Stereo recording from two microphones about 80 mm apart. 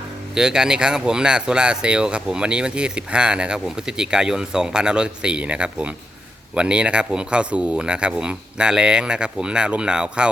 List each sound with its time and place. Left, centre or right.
0.3 s speech: centre